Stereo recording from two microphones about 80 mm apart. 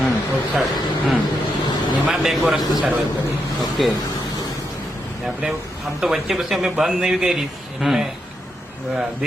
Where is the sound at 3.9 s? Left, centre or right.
Left.